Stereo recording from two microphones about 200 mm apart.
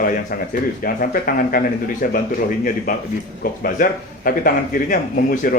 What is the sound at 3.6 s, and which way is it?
Speech, 45° left (ahead or behind).